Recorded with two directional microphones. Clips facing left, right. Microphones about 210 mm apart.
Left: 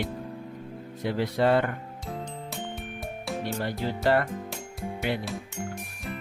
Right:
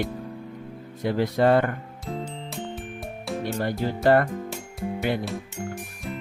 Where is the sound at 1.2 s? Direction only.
50° right (ahead or behind).